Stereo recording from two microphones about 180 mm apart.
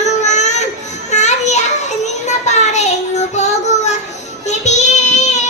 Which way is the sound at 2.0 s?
40° left (ahead or behind).